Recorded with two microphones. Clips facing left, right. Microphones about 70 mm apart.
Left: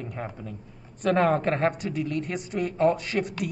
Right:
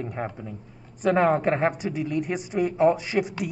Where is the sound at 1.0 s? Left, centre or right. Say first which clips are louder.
Right 2 dB; centre.